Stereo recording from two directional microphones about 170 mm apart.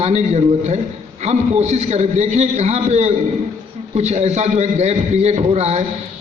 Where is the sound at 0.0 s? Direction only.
40° right (ahead or behind).